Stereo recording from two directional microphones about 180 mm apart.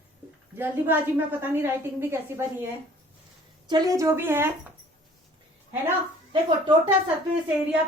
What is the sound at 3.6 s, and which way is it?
Speech, 25° right (ahead or behind).